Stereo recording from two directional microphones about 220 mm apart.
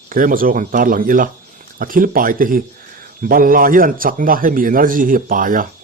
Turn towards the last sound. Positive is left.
turn(degrees=-40)  # may be behind; listen again after turning